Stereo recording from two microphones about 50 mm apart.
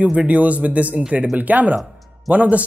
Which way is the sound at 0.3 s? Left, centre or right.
Right.